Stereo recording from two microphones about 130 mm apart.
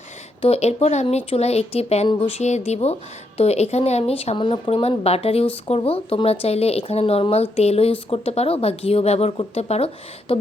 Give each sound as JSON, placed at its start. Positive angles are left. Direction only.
{"t": 0.4, "sound": "a woman's voice", "side_deg": 55}